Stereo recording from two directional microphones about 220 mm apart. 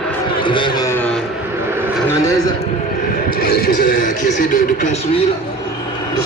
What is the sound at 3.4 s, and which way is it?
Speech, 45° left (ahead or behind).